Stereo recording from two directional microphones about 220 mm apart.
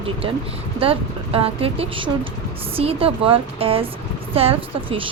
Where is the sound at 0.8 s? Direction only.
25° right (ahead or behind).